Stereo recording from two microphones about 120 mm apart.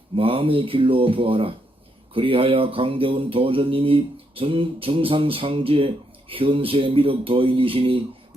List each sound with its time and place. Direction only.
0.2 s mantra: 50° right (ahead or behind)